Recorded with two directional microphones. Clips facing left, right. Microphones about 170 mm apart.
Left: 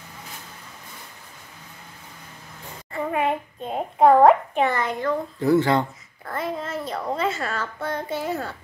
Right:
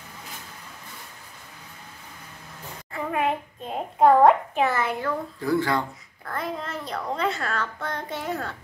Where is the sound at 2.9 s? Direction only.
Centre (ahead or behind).